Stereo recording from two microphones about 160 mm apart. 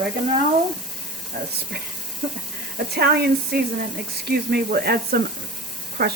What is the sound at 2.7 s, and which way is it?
Speech, 80° right.